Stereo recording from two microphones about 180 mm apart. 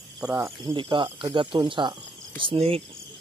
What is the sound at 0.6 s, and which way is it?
Speech, 25° right (ahead or behind).